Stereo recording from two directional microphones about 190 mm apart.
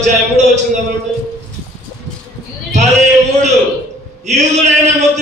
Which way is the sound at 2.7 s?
35° right (ahead or behind).